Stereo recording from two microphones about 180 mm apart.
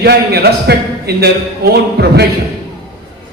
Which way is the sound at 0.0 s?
60° right (ahead or behind).